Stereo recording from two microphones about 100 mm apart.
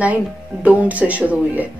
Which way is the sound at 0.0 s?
15° right (ahead or behind).